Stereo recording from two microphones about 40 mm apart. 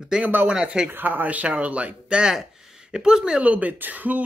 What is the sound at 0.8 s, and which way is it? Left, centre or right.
Speech, right.